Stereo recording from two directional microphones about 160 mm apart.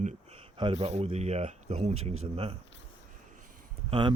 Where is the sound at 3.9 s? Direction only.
30° right (ahead or behind).